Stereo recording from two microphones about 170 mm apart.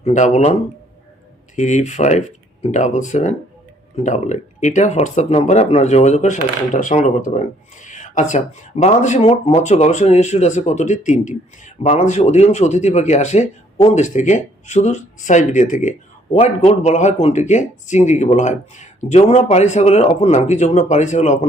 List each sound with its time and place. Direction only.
0.0 s speech: 45° left (ahead or behind)